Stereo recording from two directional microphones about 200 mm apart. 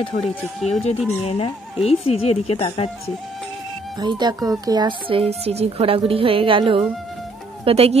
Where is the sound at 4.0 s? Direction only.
20° right (ahead or behind).